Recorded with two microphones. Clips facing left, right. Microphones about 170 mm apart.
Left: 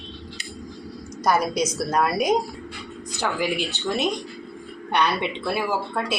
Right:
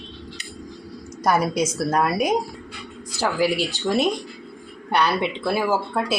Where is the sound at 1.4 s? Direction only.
10° right (ahead or behind).